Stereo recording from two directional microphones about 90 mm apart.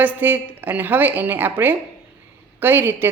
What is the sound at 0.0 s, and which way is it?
A woman's voice, 20° right (ahead or behind).